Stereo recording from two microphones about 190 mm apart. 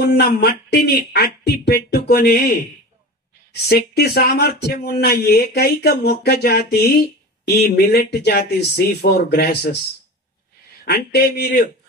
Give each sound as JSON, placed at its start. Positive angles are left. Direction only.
{"t": 0.0, "sound": "speech", "side_deg": 55}
{"t": 3.6, "sound": "speech", "side_deg": 55}
{"t": 10.9, "sound": "speech", "side_deg": 55}